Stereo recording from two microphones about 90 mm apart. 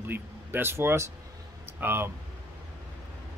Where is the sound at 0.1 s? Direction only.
25° right (ahead or behind).